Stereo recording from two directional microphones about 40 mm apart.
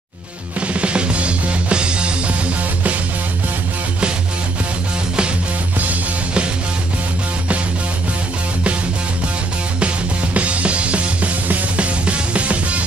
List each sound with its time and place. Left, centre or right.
0.6 s music: right
10.3 s music: right